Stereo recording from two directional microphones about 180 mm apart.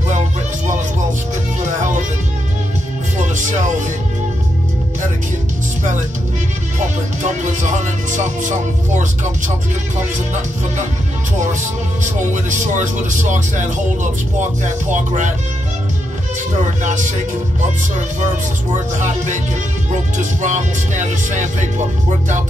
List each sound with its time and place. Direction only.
1.6 s music: 45° right (ahead or behind)
3.2 s music: 45° right (ahead or behind)
7.2 s music: 40° right (ahead or behind)
12.0 s speech: 45° right (ahead or behind)
18.9 s speech: 40° right (ahead or behind)